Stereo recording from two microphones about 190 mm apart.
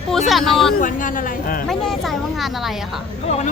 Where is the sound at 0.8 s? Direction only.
45° left (ahead or behind).